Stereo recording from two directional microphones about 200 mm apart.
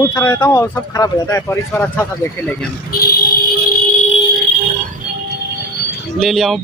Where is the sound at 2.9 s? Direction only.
50° left (ahead or behind).